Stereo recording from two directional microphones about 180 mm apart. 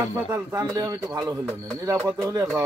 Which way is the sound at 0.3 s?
20° right (ahead or behind).